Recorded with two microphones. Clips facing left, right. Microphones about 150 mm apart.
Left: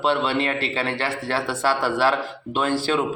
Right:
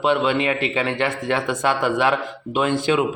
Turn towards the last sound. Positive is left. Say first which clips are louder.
# right 3 dB
turn(degrees=-15)  # may be behind; listen again after turning